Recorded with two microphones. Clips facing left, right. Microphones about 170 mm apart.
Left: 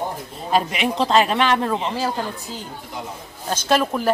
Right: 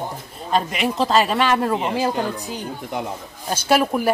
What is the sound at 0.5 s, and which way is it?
A man's voice, centre (ahead or behind).